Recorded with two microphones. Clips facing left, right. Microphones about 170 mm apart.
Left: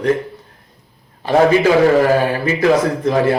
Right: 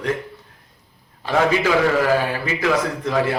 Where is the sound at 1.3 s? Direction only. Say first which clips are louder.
Left 6 dB; 40° left (ahead or behind).